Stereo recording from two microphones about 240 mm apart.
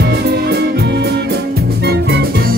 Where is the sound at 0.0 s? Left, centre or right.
Right.